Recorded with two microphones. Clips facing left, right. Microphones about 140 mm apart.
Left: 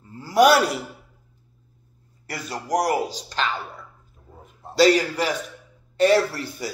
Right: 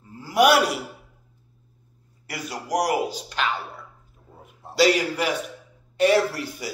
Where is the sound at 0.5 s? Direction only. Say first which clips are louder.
Left 1 dB; 10° right (ahead or behind).